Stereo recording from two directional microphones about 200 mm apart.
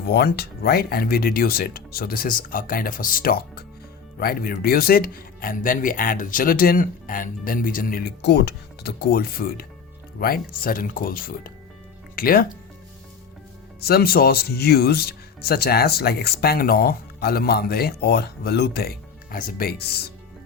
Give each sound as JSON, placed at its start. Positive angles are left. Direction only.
{"t": 0.0, "sound": "speech", "side_deg": 50}
{"t": 13.8, "sound": "speech", "side_deg": 50}